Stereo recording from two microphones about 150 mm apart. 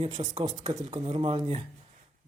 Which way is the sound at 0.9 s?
30° right (ahead or behind).